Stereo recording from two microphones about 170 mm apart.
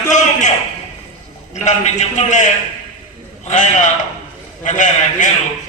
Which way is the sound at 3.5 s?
45° left (ahead or behind).